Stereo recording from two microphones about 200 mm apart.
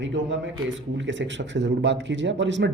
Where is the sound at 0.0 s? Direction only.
65° right (ahead or behind).